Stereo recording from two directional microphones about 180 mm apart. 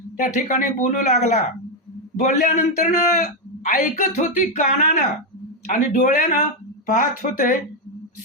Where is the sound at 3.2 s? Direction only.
45° left (ahead or behind).